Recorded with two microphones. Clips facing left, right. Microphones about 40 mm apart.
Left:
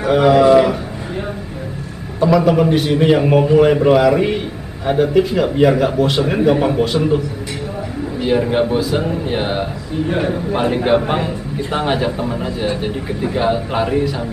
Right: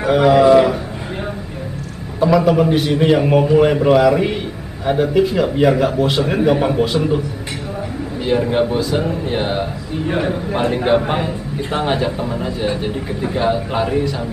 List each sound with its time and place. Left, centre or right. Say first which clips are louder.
0.0 s a man's voice: even; centre
2.1 s a man's voice: even; centre
8.2 s a man's voice: left 1 dB; centre
10.0 s a man's voice: even; centre